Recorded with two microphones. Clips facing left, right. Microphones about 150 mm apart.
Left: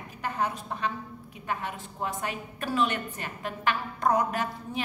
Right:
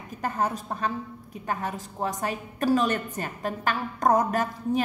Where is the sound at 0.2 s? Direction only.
40° right (ahead or behind).